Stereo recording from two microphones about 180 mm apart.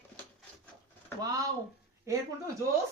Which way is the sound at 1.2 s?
20° right (ahead or behind).